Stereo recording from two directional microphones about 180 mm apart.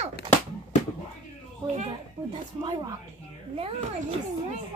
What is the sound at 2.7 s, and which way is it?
A woman's voice, 25° right (ahead or behind).